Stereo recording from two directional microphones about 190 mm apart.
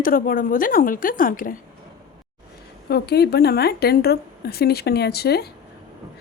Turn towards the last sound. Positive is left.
turn(degrees=55)  # may be behind; listen again after turning